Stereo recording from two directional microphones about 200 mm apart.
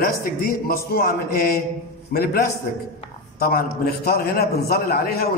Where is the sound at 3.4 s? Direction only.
50° left (ahead or behind).